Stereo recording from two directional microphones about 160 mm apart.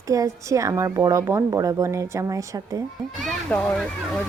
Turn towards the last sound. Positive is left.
turn(degrees=5)  # may be behind; listen again after turning